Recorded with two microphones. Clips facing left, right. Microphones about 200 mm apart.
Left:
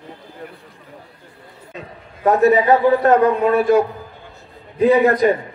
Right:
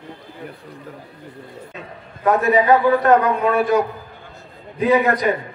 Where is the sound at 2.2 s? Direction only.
25° left (ahead or behind).